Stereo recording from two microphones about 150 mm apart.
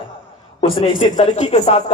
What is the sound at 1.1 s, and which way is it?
Speech, 50° left (ahead or behind).